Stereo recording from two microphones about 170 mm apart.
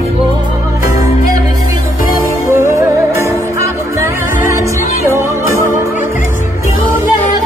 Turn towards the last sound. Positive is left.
turn(degrees=-15)  # may be behind; listen again after turning